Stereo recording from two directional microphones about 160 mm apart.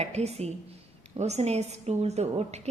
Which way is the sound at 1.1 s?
40° right (ahead or behind).